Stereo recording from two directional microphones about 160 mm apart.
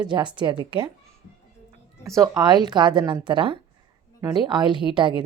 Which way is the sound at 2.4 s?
25° right (ahead or behind).